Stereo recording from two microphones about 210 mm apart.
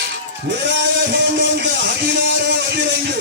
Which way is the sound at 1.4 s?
55° right (ahead or behind).